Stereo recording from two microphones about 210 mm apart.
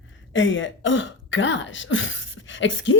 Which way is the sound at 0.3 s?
65° left (ahead or behind).